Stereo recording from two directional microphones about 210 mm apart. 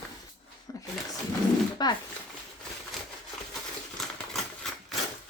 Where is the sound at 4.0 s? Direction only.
Centre (ahead or behind).